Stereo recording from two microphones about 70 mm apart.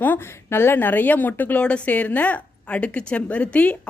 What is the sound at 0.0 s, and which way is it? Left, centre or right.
Speech, left.